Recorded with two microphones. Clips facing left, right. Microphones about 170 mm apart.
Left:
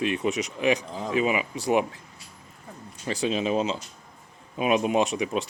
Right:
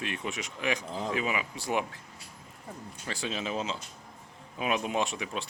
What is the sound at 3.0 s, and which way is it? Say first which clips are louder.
Speech: left 9 dB; 15° left (ahead or behind).